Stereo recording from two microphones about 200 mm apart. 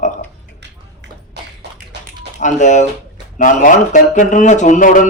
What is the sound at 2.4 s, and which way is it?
Speech, 35° left (ahead or behind).